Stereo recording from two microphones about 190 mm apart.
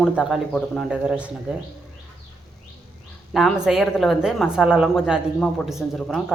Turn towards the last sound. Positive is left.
turn(degrees=0)  # may be behind; listen again after turning